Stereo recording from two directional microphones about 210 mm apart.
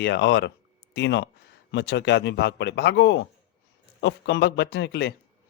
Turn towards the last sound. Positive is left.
turn(degrees=55)  # may be behind; listen again after turning